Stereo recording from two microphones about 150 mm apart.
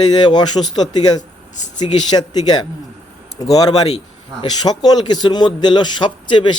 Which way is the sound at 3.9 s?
40° left (ahead or behind).